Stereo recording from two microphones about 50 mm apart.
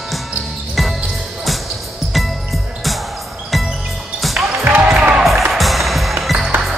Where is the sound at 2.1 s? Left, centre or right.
Centre.